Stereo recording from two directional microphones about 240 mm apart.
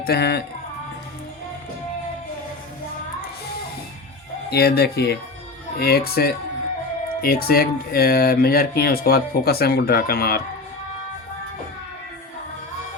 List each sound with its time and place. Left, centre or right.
0.0 s speech: left
4.4 s speech: left